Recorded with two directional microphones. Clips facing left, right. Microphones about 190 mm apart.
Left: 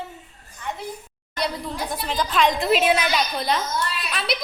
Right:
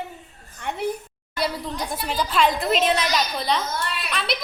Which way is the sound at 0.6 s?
65° right (ahead or behind).